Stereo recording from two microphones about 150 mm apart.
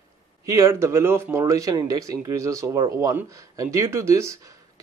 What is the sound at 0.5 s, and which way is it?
Speech, 20° right (ahead or behind).